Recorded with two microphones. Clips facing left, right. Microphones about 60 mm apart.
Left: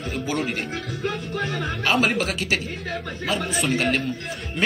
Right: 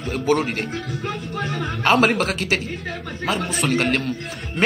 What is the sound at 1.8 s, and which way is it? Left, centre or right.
Speech, right.